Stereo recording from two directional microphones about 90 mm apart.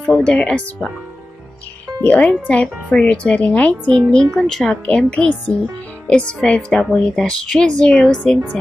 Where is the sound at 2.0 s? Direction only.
15° left (ahead or behind).